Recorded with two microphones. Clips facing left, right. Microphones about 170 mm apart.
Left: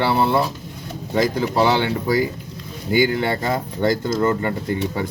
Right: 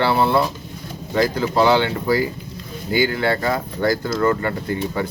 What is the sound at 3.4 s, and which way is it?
Speech, 20° left (ahead or behind).